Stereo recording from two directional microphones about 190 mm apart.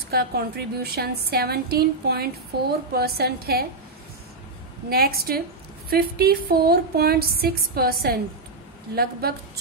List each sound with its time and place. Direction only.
0.1 s a woman's voice: 55° right (ahead or behind)
4.8 s a woman's voice: 50° right (ahead or behind)